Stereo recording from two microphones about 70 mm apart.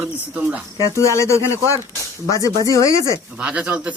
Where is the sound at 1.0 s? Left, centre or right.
Left.